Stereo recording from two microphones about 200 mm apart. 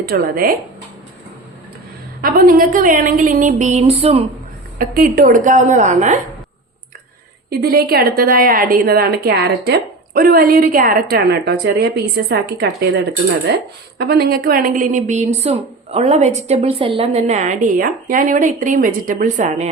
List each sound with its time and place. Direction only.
0.0 s a woman's voice: 50° right (ahead or behind)
2.2 s a woman's voice: 45° right (ahead or behind); by 4.2 s 30° right (ahead or behind)
4.8 s a woman's voice: 45° right (ahead or behind)
7.5 s a woman's voice: 50° right (ahead or behind)